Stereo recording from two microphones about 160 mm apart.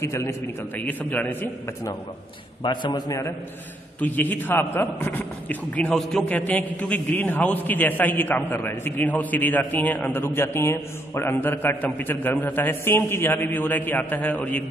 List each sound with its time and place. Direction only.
0.0 s a man's voice: 15° left (ahead or behind)
2.6 s a man's voice: 30° left (ahead or behind); by 14.6 s 10° left (ahead or behind)